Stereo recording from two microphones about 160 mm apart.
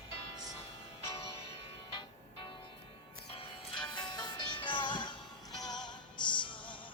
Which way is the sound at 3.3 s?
30° left (ahead or behind).